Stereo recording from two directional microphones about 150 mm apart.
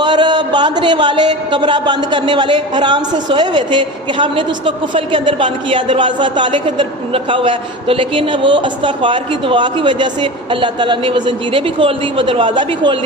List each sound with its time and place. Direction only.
0.0 s speech: 30° right (ahead or behind)